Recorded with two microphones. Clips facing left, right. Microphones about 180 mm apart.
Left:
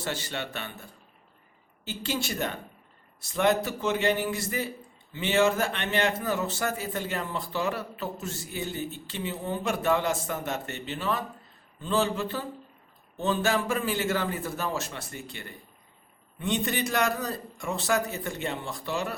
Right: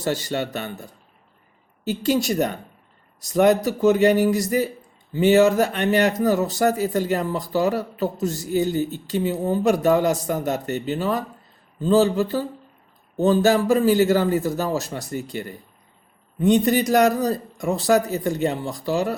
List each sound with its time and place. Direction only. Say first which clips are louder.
0.0 s speech: right 9 dB; 40° right (ahead or behind)
2.0 s speech: right 10 dB; 40° right (ahead or behind)